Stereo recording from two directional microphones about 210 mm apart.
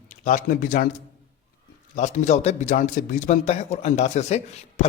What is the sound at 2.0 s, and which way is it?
A man's voice, 35° left (ahead or behind).